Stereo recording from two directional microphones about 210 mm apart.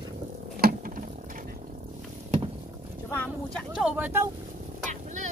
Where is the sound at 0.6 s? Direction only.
45° right (ahead or behind).